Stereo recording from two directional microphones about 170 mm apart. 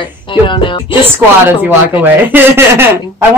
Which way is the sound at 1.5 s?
10° right (ahead or behind).